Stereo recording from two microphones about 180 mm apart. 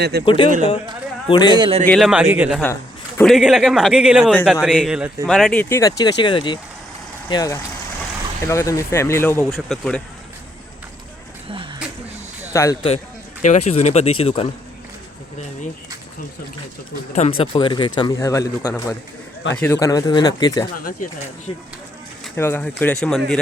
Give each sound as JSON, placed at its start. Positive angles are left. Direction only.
{"t": 0.0, "sound": "speech", "side_deg": -65}
{"t": 0.3, "sound": "speech", "side_deg": 30}
{"t": 1.5, "sound": "speech", "side_deg": -25}
{"t": 1.8, "sound": "a man's voice", "side_deg": 0}
{"t": 5.6, "sound": "speech", "side_deg": 15}
{"t": 9.5, "sound": "speech", "side_deg": 0}
{"t": 12.5, "sound": "speech", "side_deg": 15}
{"t": 13.4, "sound": "speech", "side_deg": 40}
{"t": 17.2, "sound": "speech", "side_deg": 35}
{"t": 20.7, "sound": "speech", "side_deg": 50}
{"t": 22.4, "sound": "speech", "side_deg": 10}